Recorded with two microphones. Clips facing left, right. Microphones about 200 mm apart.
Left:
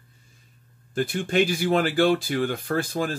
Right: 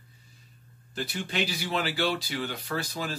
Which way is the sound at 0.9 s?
50° left (ahead or behind).